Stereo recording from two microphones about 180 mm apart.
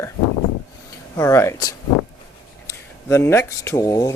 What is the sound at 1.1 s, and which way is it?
Speech, 15° left (ahead or behind).